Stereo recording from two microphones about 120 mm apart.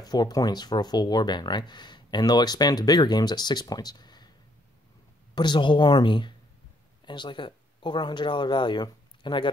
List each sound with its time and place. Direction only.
0.0 s speech: 35° left (ahead or behind)
5.3 s speech: 40° left (ahead or behind)